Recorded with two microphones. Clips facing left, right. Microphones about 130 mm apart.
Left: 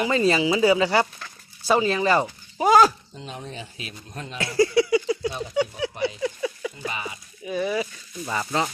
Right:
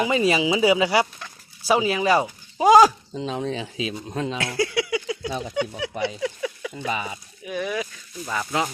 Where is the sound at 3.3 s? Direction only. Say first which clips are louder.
Right 9 dB; 90° right.